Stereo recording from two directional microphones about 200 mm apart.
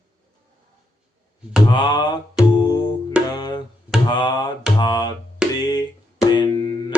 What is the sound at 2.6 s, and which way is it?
Music, 20° left (ahead or behind).